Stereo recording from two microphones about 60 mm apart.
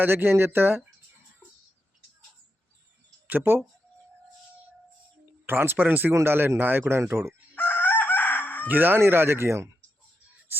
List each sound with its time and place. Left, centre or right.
0.0 s speech: right
3.2 s speech: right
5.5 s speech: right
7.5 s chicken: left
8.6 s speech: right
9.0 s speech: right